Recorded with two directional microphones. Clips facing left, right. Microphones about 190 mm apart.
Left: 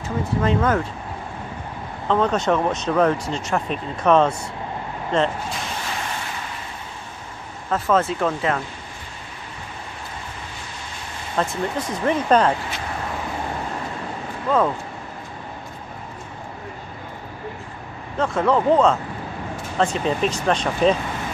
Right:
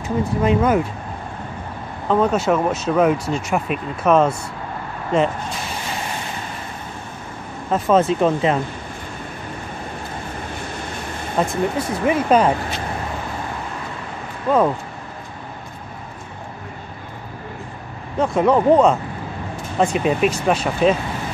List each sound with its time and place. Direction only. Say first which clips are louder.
0.4 s speech: right 3 dB; 15° right (ahead or behind)
2.0 s speech: right 2 dB; 10° right (ahead or behind)
7.7 s speech: right 4 dB; 15° right (ahead or behind)
11.3 s speech: right 3 dB; 10° right (ahead or behind)
14.5 s speech: right 3 dB; 15° right (ahead or behind)
18.1 s speech: right 3 dB; 15° right (ahead or behind)